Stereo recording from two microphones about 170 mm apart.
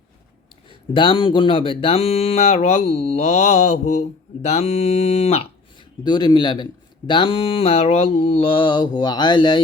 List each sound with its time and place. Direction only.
0.7 s speech: 30° left (ahead or behind)
6.1 s speech: 25° left (ahead or behind)